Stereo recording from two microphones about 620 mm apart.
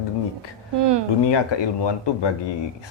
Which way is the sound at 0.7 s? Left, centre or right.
Right.